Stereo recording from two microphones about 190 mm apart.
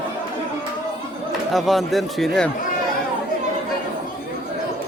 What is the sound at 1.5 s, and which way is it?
Speech, centre (ahead or behind).